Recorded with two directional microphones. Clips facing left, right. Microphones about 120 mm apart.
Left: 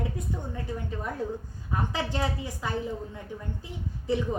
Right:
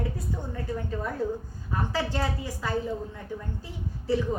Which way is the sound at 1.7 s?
15° left (ahead or behind).